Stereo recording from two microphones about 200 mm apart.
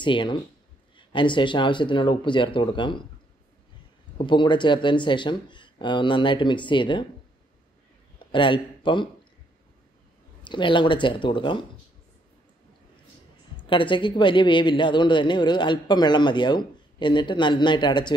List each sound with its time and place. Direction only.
0.0 s a woman's voice: 25° left (ahead or behind)
4.2 s a woman's voice: 25° left (ahead or behind)
8.3 s speech: 25° left (ahead or behind)
10.4 s a woman's voice: 25° left (ahead or behind)
13.6 s a woman's voice: 25° left (ahead or behind)